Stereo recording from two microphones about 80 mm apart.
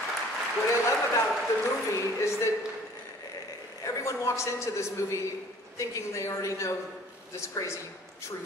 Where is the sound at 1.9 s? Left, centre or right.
Left.